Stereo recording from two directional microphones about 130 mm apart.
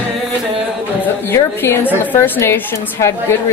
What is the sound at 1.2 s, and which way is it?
A woman's voice, 20° left (ahead or behind).